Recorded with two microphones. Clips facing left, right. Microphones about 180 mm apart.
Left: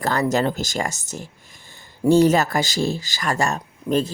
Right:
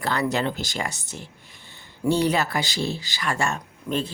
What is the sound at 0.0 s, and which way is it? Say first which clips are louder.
Speech: left 4 dB; 45° left (ahead or behind).